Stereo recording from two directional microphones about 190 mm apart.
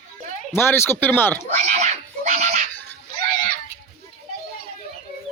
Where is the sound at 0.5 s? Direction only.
10° left (ahead or behind).